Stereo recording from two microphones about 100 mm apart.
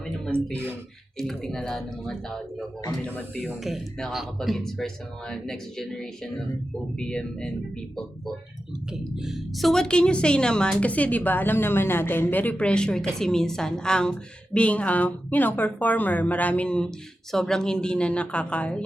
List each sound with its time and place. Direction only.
0.3 s a woman's voice: 10° left (ahead or behind)
3.0 s a woman's voice: 15° left (ahead or behind)
3.4 s a woman's voice: centre (ahead or behind)
8.9 s a woman's voice: 5° right (ahead or behind); by 18.8 s 10° left (ahead or behind)